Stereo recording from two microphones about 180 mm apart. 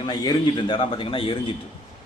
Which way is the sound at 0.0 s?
25° left (ahead or behind).